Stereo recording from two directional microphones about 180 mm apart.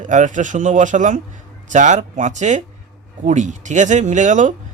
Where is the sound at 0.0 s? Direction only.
45° right (ahead or behind).